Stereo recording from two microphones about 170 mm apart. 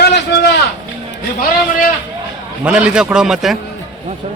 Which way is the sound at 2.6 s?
5° right (ahead or behind).